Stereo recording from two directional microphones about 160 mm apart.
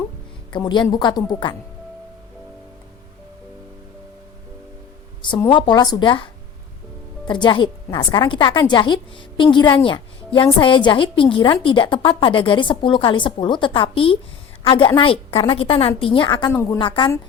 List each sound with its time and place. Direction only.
0.5 s a woman's voice: 30° left (ahead or behind)
5.5 s a woman's voice: 30° left (ahead or behind)
7.3 s a woman's voice: 30° left (ahead or behind)
16.5 s speech: 15° left (ahead or behind)
16.7 s a woman's voice: 30° left (ahead or behind)